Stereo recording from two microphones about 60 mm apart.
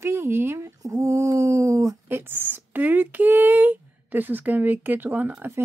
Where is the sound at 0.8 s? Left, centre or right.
Right.